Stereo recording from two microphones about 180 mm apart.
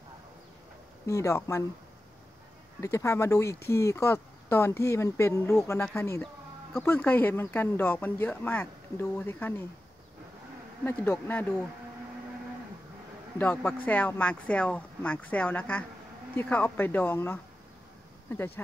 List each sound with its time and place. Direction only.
1.0 s speech: 15° left (ahead or behind)
2.8 s speech: 15° left (ahead or behind)
10.9 s speech: 10° left (ahead or behind)
13.4 s speech: 10° left (ahead or behind)